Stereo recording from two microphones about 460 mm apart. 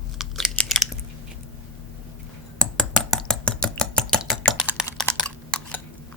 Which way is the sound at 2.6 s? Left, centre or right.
Centre.